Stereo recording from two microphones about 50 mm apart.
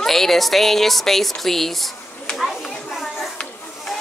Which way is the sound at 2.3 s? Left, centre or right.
Centre.